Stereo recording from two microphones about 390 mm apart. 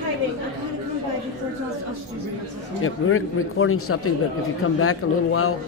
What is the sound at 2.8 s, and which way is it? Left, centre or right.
A man's voice, left.